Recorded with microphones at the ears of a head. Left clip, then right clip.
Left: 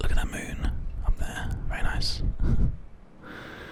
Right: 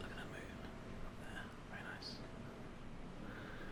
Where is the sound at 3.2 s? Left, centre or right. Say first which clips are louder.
Left 13 dB; left.